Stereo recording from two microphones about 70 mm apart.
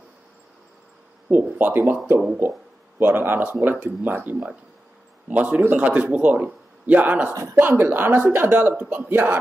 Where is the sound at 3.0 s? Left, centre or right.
Right.